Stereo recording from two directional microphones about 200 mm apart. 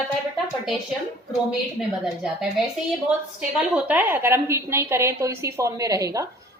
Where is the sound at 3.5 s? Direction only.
5° right (ahead or behind).